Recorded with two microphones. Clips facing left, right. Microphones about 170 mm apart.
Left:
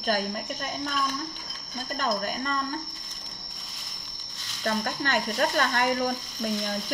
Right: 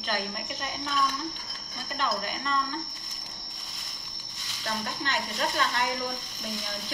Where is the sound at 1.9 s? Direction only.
45° left (ahead or behind).